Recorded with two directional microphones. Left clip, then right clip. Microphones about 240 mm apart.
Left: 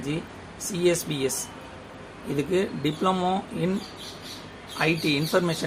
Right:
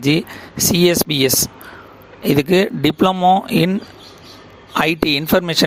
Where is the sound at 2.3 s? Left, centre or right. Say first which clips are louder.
Right 10 dB; right.